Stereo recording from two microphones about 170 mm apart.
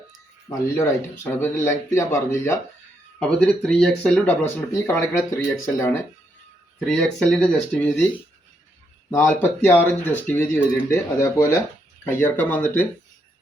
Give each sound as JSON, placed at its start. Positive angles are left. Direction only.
{"t": 0.4, "sound": "speech", "side_deg": 15}
{"t": 3.4, "sound": "speech", "side_deg": 5}
{"t": 6.7, "sound": "speech", "side_deg": 5}
{"t": 9.0, "sound": "speech", "side_deg": 15}